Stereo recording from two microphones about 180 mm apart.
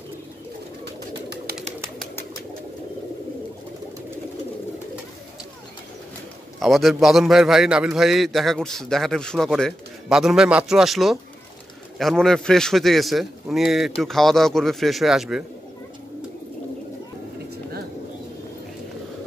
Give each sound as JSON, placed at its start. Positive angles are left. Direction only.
{"t": 1.5, "sound": "bird", "side_deg": -60}
{"t": 6.6, "sound": "a man's voice", "side_deg": 0}